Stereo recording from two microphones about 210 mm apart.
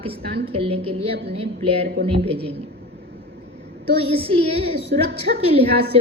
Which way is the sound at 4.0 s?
25° right (ahead or behind).